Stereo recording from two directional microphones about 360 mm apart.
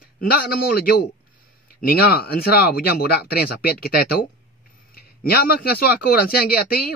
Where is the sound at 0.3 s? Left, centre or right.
Left.